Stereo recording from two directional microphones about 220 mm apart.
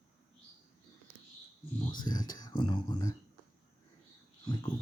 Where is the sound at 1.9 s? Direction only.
20° left (ahead or behind).